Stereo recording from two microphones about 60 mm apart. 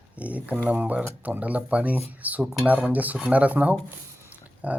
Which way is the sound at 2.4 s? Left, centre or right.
Centre.